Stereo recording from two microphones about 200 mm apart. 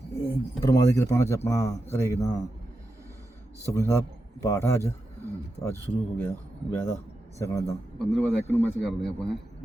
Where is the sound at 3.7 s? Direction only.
15° left (ahead or behind).